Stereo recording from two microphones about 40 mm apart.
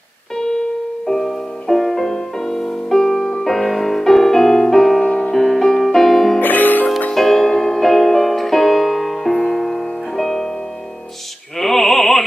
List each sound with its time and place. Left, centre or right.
1.0 s music: centre
3.4 s music: centre
5.0 s music: left
6.4 s music: left
7.2 s music: centre
11.5 s opera: centre